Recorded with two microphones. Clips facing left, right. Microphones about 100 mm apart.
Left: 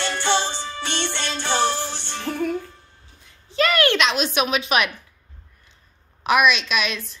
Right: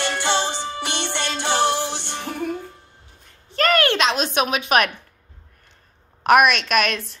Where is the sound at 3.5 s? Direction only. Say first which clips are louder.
Right 1 dB; 45° right (ahead or behind).